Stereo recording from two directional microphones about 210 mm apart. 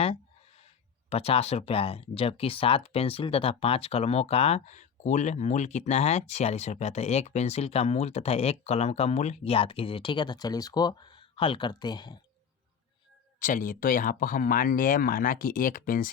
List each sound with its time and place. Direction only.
1.1 s speech: 30° left (ahead or behind)
13.4 s speech: 40° left (ahead or behind)